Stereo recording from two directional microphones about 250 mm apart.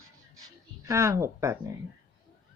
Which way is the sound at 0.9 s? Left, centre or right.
Centre.